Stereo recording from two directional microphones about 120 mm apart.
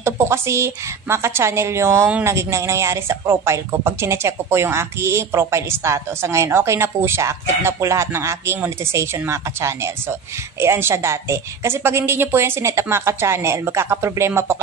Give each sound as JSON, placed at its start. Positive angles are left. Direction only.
{"t": 0.0, "sound": "speech", "side_deg": -20}